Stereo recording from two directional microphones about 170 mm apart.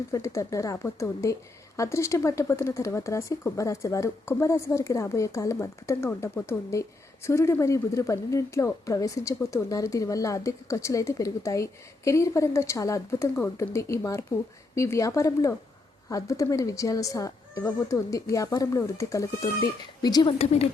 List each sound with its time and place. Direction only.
0.1 s a woman's voice: 20° left (ahead or behind)
20.4 s a woman's voice: 40° left (ahead or behind)